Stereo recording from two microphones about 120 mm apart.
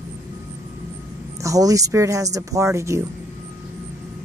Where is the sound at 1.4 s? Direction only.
30° right (ahead or behind).